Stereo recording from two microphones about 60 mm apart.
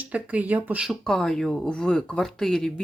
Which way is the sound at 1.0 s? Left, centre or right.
Centre.